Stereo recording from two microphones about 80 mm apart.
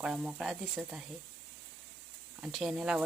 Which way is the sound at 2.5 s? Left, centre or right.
Centre.